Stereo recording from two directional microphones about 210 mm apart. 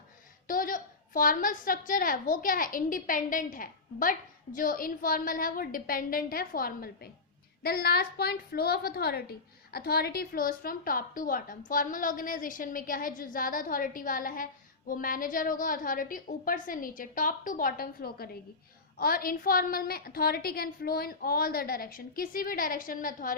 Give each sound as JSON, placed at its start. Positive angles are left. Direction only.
{"t": 0.4, "sound": "a woman's voice", "side_deg": 40}